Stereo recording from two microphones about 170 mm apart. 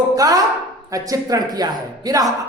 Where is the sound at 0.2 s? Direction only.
20° right (ahead or behind).